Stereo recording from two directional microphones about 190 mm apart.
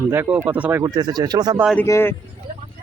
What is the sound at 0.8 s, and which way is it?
Speech, 20° right (ahead or behind).